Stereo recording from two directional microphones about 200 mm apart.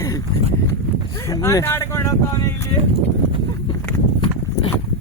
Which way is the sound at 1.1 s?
15° left (ahead or behind).